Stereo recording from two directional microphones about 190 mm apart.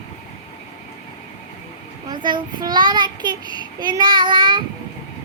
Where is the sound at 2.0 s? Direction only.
25° right (ahead or behind).